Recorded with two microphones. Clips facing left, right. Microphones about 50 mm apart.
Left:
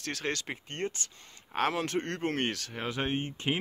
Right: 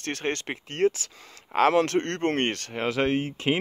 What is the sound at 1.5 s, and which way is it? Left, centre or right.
Speech, right.